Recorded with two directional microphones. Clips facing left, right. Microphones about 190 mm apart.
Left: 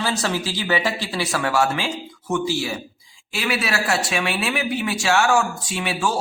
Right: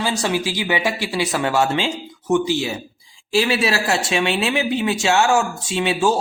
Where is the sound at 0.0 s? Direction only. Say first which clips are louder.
Right 3 dB; 15° right (ahead or behind).